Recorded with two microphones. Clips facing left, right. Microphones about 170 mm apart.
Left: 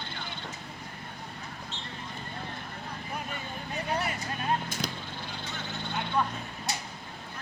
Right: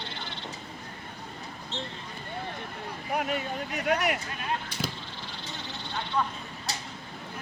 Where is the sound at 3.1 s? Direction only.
75° right (ahead or behind).